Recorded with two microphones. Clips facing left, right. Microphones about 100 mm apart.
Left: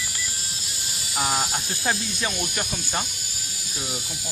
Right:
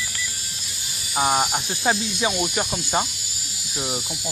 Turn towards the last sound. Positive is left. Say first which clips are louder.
# right 5 dB
turn(degrees=-10)  # may be behind; listen again after turning